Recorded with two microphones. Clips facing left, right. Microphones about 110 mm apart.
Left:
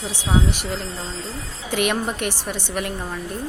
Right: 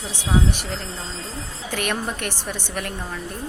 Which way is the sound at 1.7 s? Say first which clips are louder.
Left 4 dB; 15° left (ahead or behind).